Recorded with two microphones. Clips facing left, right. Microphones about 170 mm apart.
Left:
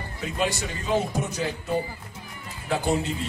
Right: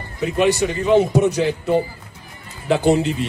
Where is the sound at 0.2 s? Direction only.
70° right (ahead or behind).